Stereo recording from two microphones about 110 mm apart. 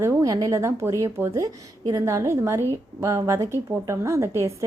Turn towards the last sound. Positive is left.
turn(degrees=-25)  # may be behind; listen again after turning